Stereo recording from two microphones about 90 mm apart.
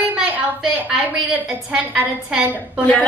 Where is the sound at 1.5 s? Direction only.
10° right (ahead or behind).